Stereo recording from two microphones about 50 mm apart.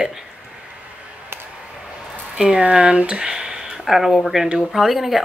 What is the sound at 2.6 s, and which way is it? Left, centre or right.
Speech, right.